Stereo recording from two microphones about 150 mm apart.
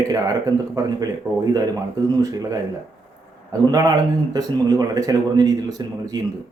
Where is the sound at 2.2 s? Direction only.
25° right (ahead or behind).